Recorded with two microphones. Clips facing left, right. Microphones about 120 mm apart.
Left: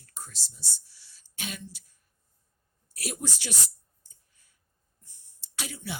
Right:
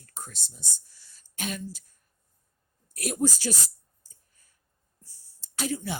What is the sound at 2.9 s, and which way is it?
Speech, 50° right (ahead or behind).